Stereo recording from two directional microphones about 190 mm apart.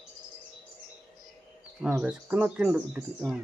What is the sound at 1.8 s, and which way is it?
Speech, 5° right (ahead or behind).